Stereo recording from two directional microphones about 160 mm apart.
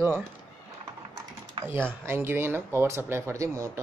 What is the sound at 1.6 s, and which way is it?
Speech, 15° right (ahead or behind).